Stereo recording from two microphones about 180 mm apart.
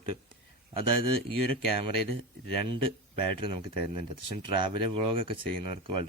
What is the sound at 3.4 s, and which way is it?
Speech, 30° right (ahead or behind).